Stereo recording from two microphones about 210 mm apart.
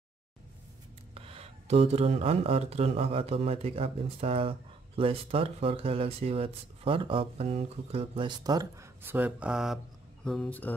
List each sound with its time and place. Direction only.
1.1 s speech: 30° right (ahead or behind); by 10.7 s 5° left (ahead or behind)